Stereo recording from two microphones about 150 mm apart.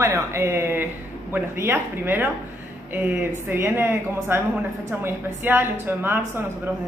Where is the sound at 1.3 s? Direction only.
15° right (ahead or behind).